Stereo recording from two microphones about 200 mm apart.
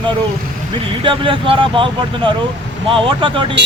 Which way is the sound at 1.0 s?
25° right (ahead or behind).